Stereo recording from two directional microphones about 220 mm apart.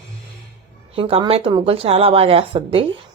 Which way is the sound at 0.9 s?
25° right (ahead or behind).